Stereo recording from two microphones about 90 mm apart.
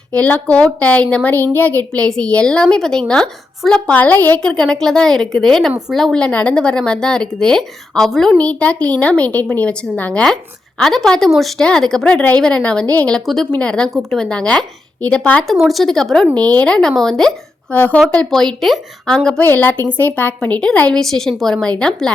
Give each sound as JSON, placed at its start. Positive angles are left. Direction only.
{"t": 0.1, "sound": "a woman's voice", "side_deg": 15}
{"t": 13.2, "sound": "a woman's voice", "side_deg": 0}
{"t": 13.5, "sound": "a woman's voice", "side_deg": 10}
{"t": 15.4, "sound": "a woman's voice", "side_deg": 0}
{"t": 17.7, "sound": "a woman's voice", "side_deg": 15}